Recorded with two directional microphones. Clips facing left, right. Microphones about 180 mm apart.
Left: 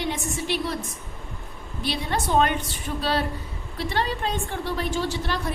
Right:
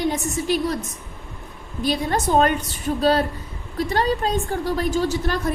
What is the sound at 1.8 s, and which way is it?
A woman's voice, 45° right (ahead or behind).